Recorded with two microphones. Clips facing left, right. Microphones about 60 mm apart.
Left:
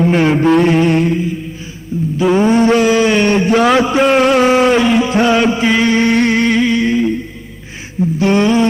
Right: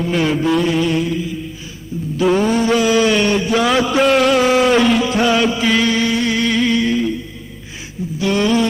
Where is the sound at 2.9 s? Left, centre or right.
Left.